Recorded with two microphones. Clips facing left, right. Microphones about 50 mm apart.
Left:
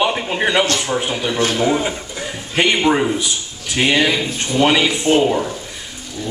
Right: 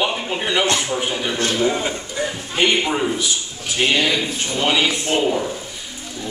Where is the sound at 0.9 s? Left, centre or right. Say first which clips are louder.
Left 2 dB; left.